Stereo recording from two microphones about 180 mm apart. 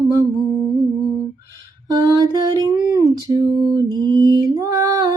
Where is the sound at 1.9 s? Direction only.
20° right (ahead or behind).